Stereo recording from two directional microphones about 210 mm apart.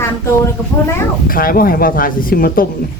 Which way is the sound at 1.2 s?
45° left (ahead or behind).